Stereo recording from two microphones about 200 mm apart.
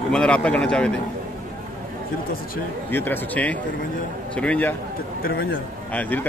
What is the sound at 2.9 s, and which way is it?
Speech, 10° left (ahead or behind).